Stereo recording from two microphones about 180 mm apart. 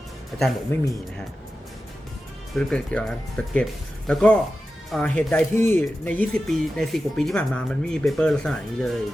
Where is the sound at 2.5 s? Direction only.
5° left (ahead or behind).